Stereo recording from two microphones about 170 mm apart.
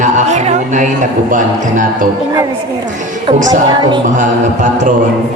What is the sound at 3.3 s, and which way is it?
Music, 50° right (ahead or behind).